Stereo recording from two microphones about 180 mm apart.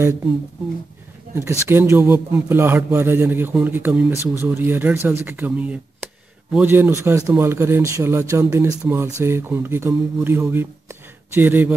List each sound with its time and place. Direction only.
1.3 s a man's voice: 15° right (ahead or behind)